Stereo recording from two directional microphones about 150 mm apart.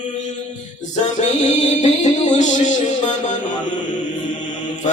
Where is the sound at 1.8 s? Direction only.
50° left (ahead or behind).